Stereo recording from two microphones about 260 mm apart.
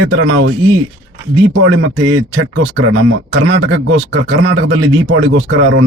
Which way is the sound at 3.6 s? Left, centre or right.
Right.